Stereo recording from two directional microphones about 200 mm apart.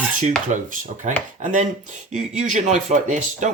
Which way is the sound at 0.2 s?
40° right (ahead or behind).